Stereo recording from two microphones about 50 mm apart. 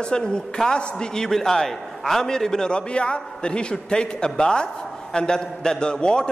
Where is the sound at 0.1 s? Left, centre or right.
Centre.